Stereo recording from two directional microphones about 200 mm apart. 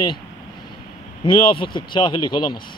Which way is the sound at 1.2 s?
25° left (ahead or behind).